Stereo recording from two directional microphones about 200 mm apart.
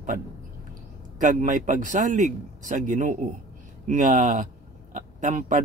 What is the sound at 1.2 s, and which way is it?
Speech, 40° right (ahead or behind).